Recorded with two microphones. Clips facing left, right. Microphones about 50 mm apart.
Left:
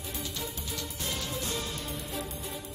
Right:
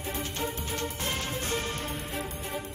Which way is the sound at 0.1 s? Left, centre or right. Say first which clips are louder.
Right 5 dB; right.